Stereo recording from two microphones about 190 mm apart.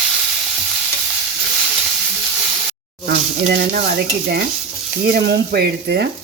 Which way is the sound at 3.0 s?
55° right (ahead or behind).